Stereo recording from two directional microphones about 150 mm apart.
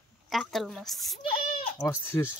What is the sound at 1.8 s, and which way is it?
Speech, 15° left (ahead or behind).